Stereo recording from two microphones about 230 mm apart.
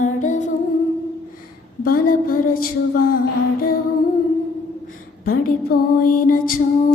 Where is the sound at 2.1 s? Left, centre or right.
Left.